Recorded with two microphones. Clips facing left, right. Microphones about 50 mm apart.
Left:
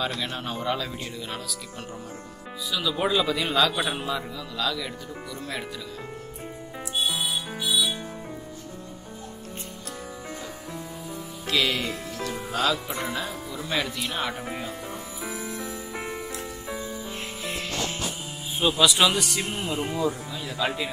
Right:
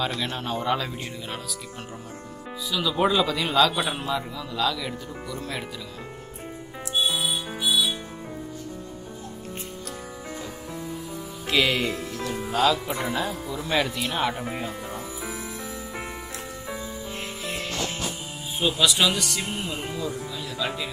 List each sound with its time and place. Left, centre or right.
0.0 s speech: centre
2.7 s speech: centre
7.1 s music: centre
7.5 s music: centre
11.4 s speech: centre
15.9 s music: centre
18.6 s speech: centre
19.1 s speech: centre